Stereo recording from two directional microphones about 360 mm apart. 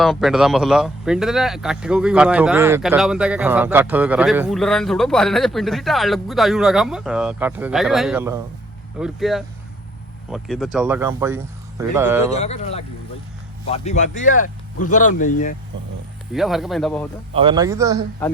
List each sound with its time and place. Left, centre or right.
0.0 s speech: centre
12.3 s speech: centre
16.3 s speech: centre
17.3 s speech: centre